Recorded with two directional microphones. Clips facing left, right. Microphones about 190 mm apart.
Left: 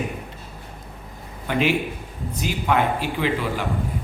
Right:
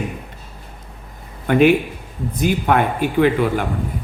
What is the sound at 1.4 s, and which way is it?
A man's voice, 55° right (ahead or behind).